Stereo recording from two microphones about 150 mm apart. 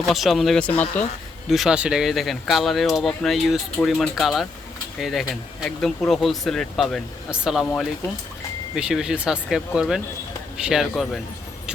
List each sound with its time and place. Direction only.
0.1 s speech: centre (ahead or behind)
1.5 s speech: centre (ahead or behind)